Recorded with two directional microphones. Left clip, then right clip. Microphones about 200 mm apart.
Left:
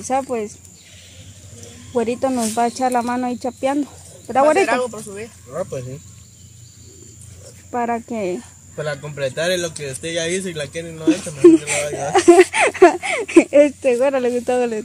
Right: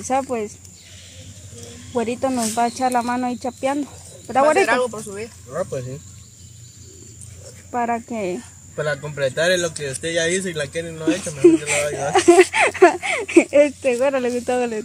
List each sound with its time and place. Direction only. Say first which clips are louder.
0.0 s speech: left 1 dB; 10° left (ahead or behind)
2.0 s speech: left 2 dB; 20° left (ahead or behind)
4.6 s speech: right 1 dB; 5° right (ahead or behind)
5.5 s speech: even; 5° left (ahead or behind)
7.7 s speech: left 1 dB; 15° left (ahead or behind)